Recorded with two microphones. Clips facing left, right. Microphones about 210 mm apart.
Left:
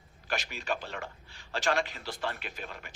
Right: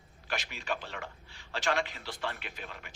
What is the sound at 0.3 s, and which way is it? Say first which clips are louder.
A man's voice: left 2 dB; 40° left (ahead or behind).